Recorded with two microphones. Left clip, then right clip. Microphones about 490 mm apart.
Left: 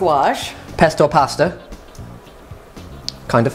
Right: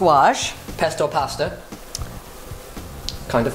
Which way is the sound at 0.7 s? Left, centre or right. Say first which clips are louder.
Left 8 dB; left.